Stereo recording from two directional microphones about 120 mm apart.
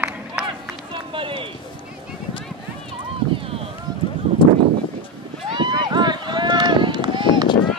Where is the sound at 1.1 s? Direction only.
45° right (ahead or behind).